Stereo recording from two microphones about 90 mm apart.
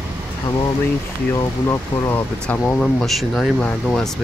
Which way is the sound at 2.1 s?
20° left (ahead or behind).